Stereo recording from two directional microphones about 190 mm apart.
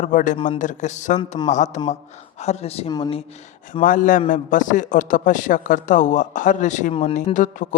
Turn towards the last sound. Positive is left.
turn(degrees=40)  # may be behind; listen again after turning